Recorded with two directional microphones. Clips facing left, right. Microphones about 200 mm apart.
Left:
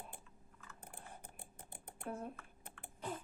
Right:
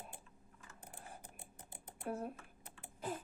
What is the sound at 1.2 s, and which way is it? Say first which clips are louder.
Typing: left 1 dB; 55° left (ahead or behind).